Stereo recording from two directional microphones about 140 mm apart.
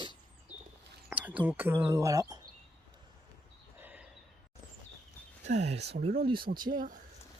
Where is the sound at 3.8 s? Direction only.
10° right (ahead or behind).